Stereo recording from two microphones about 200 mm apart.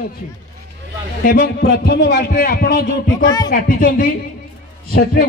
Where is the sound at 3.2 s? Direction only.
20° left (ahead or behind).